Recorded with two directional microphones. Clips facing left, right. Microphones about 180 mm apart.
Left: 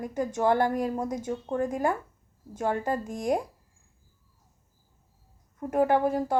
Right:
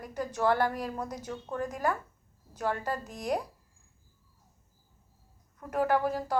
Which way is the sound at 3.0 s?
50° left (ahead or behind).